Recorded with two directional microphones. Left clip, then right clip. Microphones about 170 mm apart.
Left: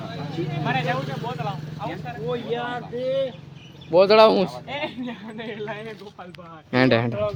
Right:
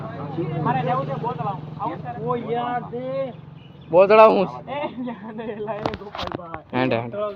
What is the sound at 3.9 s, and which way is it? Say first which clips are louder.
Speech: right 2 dB; 30° left (ahead or behind).